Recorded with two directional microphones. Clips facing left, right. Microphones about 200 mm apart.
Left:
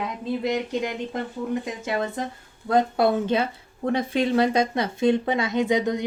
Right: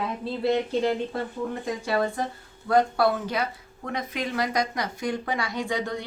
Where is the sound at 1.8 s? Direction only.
20° left (ahead or behind).